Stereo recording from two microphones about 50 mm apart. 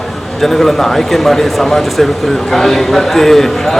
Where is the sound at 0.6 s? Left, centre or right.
Centre.